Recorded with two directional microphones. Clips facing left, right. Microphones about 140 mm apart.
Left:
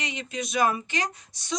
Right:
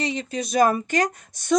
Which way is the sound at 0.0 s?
35° right (ahead or behind).